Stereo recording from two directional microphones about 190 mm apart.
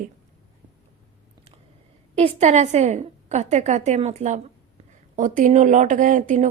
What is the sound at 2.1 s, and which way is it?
A woman's voice, 35° right (ahead or behind).